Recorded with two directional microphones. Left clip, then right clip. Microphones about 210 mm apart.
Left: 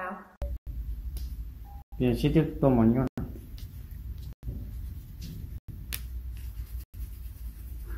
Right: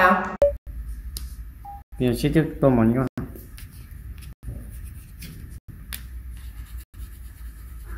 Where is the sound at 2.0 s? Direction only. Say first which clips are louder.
Right 4 dB; 20° right (ahead or behind).